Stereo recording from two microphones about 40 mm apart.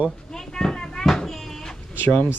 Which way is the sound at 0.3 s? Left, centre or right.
Centre.